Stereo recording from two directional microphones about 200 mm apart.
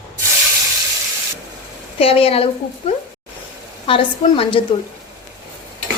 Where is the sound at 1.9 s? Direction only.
30° left (ahead or behind).